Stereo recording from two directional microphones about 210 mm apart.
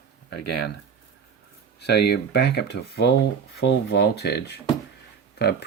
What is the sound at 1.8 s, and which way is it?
Speech, 50° left (ahead or behind).